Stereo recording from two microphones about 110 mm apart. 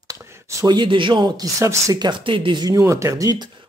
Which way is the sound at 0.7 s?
45° right (ahead or behind).